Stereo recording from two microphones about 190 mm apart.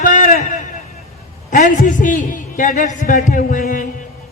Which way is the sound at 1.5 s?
40° left (ahead or behind).